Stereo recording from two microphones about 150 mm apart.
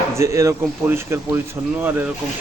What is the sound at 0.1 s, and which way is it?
Speech, 20° right (ahead or behind).